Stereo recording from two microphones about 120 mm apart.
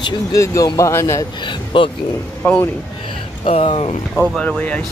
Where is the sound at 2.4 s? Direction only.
15° left (ahead or behind).